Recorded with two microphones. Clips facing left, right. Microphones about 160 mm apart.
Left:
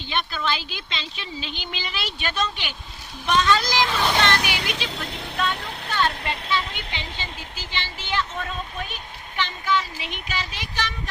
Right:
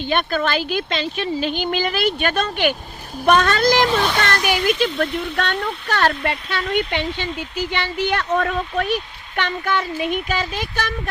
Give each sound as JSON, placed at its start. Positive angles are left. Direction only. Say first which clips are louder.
{"t": 0.1, "sound": "a child's voice", "louder": "right 6 dB", "side_deg": -55}